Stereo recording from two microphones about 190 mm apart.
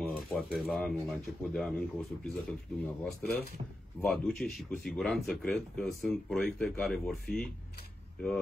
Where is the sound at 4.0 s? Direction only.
5° left (ahead or behind).